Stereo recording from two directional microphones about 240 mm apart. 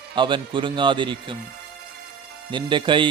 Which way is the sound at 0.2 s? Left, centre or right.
Centre.